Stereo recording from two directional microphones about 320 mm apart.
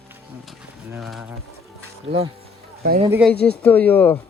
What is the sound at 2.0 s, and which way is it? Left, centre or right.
Speech, centre.